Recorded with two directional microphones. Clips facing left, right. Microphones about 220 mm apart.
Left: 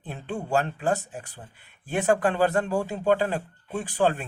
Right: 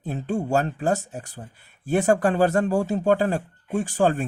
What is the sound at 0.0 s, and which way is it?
Speech, 45° right (ahead or behind).